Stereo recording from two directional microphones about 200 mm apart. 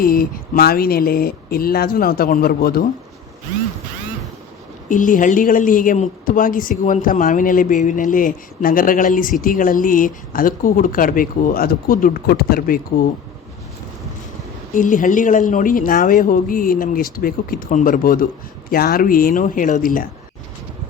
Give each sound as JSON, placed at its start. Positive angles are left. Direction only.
{"t": 0.0, "sound": "a woman's voice", "side_deg": 45}
{"t": 4.9, "sound": "a woman's voice", "side_deg": 40}
{"t": 14.8, "sound": "a woman's voice", "side_deg": 40}